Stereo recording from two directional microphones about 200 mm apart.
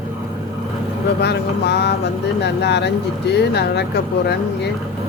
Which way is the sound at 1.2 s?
55° left (ahead or behind).